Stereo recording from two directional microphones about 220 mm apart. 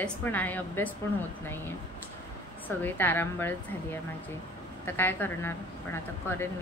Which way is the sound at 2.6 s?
10° left (ahead or behind).